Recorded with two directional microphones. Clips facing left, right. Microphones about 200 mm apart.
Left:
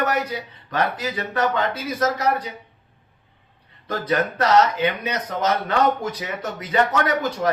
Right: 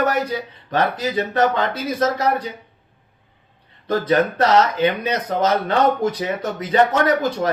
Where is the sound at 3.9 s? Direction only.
30° right (ahead or behind).